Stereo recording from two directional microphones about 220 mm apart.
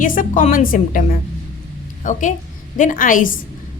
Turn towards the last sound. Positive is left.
turn(degrees=40)  # may be behind; listen again after turning